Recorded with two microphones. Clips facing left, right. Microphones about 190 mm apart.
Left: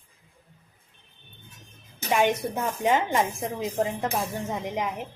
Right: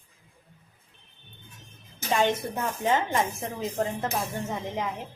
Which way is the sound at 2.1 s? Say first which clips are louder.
Left 2 dB; 15° left (ahead or behind).